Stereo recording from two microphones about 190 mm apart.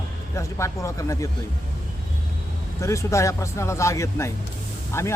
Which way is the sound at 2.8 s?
15° left (ahead or behind).